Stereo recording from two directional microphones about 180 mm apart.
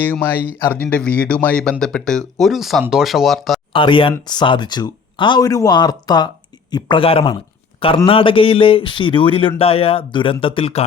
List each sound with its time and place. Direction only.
0.0 s speech: 10° left (ahead or behind)
3.7 s speech: 30° left (ahead or behind)